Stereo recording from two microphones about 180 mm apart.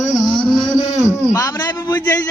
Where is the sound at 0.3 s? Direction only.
25° left (ahead or behind).